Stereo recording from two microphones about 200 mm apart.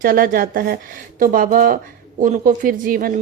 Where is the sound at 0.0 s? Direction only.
45° right (ahead or behind).